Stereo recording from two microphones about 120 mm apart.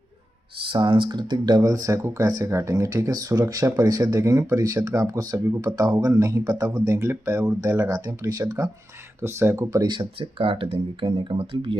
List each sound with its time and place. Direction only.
0.6 s speech: 45° right (ahead or behind); by 9.8 s 25° right (ahead or behind)
9.8 s speech: 45° right (ahead or behind)